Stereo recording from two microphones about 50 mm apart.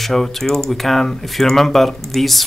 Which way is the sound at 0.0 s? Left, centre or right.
Centre.